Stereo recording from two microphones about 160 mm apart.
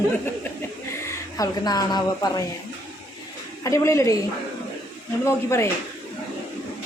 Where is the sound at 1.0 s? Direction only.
20° left (ahead or behind).